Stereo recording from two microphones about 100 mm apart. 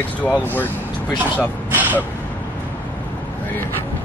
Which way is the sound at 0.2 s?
15° left (ahead or behind).